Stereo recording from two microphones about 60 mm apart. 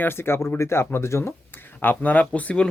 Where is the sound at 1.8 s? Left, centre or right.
Left.